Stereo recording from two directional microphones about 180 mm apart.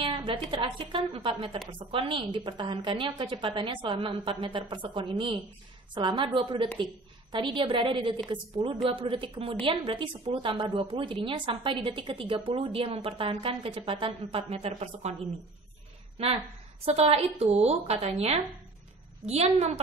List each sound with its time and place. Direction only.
0.0 s speech: 30° right (ahead or behind)
16.2 s a woman's voice: 35° right (ahead or behind)